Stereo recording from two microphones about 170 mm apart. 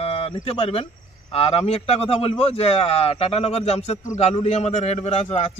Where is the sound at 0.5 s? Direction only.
35° left (ahead or behind).